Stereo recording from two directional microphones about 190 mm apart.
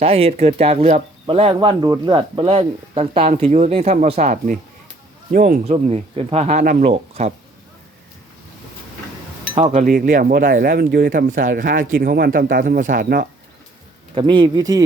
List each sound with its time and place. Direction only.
0.0 s speech: 30° right (ahead or behind)
9.7 s speech: 45° right (ahead or behind)
14.2 s speech: 25° right (ahead or behind)